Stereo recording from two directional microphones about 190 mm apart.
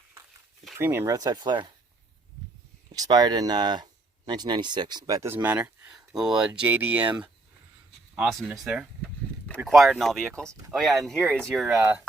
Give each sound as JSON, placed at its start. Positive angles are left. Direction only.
{"t": 0.8, "sound": "speech", "side_deg": -10}
{"t": 2.9, "sound": "speech", "side_deg": -20}
{"t": 8.1, "sound": "speech", "side_deg": 0}